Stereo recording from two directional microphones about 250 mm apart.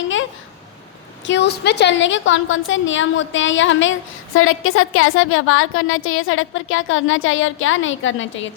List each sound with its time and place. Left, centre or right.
1.3 s a woman's voice: left